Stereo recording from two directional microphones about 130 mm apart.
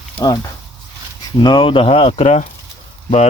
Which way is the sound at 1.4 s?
35° left (ahead or behind).